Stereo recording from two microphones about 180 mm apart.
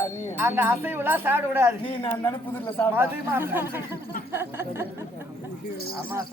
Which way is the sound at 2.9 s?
10° right (ahead or behind).